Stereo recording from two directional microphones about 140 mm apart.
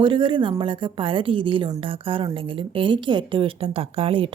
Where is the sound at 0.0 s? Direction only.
35° right (ahead or behind).